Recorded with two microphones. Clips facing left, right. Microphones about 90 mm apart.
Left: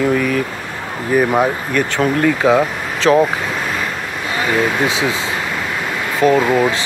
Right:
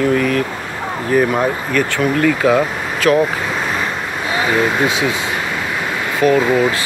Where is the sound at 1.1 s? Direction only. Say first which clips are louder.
Left 1 dB; 20° left (ahead or behind).